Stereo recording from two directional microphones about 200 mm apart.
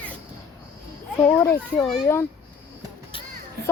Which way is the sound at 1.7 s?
30° left (ahead or behind).